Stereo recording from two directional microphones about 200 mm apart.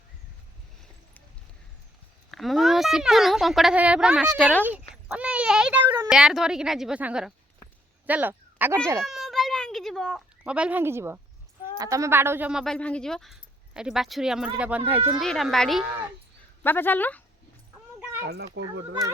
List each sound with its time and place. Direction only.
2.3 s speech: centre (ahead or behind)
8.0 s a sound: 10° right (ahead or behind)
11.8 s speech: 15° right (ahead or behind)
16.6 s a woman's voice: 10° left (ahead or behind)
18.3 s a child's voice: 55° right (ahead or behind)